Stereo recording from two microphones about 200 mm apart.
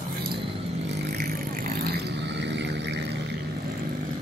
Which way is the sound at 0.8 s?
50° right (ahead or behind).